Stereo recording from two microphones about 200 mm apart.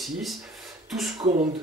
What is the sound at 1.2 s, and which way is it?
Speech, 35° right (ahead or behind).